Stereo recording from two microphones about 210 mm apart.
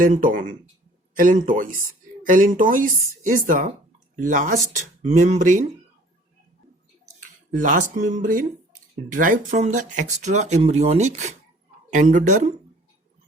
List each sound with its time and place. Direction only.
0.0 s speech: 40° right (ahead or behind)
7.0 s a sound: 35° right (ahead or behind)
8.0 s speech: 35° right (ahead or behind)